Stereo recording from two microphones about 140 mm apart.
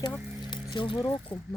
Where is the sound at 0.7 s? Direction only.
35° left (ahead or behind).